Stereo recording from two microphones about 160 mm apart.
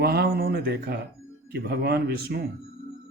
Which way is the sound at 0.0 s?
80° right.